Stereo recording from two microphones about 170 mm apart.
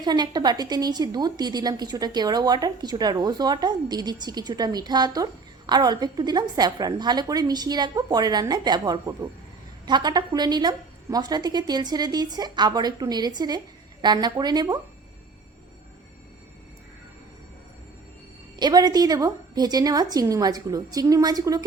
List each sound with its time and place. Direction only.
0.0 s a woman's voice: 25° right (ahead or behind)
18.6 s a woman's voice: 20° right (ahead or behind)